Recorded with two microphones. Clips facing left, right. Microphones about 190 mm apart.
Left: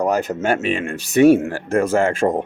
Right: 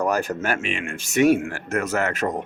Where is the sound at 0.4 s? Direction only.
35° left (ahead or behind).